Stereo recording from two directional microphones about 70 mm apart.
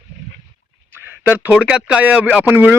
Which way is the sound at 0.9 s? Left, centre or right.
Right.